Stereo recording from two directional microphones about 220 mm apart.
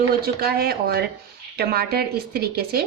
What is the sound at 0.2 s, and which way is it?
A woman's voice, 45° right (ahead or behind).